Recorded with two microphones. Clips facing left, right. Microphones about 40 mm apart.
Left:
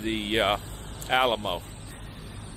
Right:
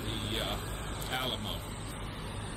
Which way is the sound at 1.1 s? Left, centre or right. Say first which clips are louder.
Left 13 dB; left.